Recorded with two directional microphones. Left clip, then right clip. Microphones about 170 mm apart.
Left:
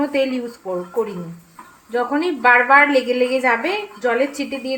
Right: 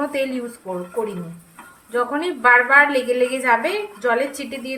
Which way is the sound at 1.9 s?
35° left (ahead or behind).